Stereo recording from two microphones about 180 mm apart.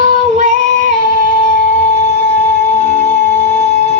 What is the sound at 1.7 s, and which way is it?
Music, 10° left (ahead or behind).